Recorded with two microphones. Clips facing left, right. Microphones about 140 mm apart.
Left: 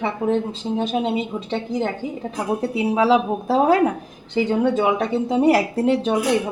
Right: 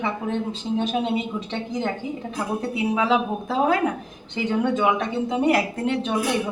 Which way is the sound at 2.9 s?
35° left (ahead or behind).